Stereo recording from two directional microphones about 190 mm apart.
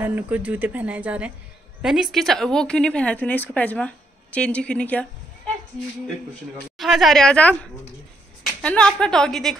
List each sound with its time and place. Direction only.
0.0 s speech: 10° right (ahead or behind); by 5.0 s 5° left (ahead or behind)
6.8 s speech: centre (ahead or behind)
8.6 s speech: 5° left (ahead or behind)